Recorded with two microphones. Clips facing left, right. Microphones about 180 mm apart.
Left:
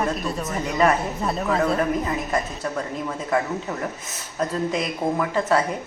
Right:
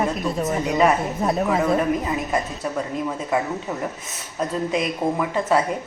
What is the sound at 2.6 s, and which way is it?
Speech, 10° right (ahead or behind).